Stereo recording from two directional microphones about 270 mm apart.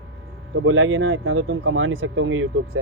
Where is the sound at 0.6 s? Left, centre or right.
Right.